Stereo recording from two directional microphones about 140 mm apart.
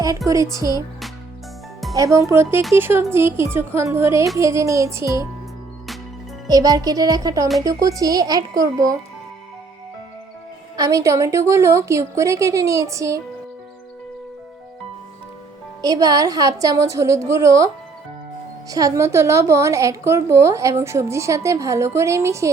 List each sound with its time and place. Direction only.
0.3 s a woman's voice: 25° right (ahead or behind)
2.0 s a woman's voice: 20° right (ahead or behind)
6.5 s a woman's voice: 25° right (ahead or behind)
10.8 s a woman's voice: 25° right (ahead or behind)
15.8 s a woman's voice: 25° right (ahead or behind)
18.7 s a woman's voice: 25° right (ahead or behind)